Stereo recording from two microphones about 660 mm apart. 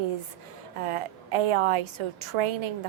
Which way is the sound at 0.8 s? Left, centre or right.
Right.